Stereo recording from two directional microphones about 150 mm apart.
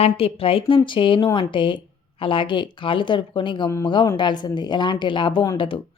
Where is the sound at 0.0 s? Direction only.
40° left (ahead or behind).